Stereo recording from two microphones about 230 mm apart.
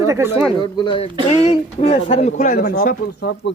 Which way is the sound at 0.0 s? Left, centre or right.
Centre.